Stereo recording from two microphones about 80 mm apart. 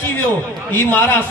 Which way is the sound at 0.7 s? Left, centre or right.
Left.